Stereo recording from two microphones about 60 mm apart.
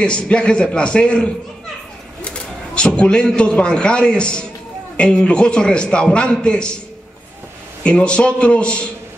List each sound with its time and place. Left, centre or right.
0.0 s a man's voice: centre
3.0 s a man's voice: centre
7.8 s a man's voice: centre